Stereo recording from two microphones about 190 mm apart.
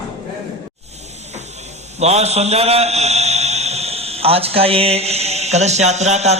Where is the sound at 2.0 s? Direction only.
35° right (ahead or behind).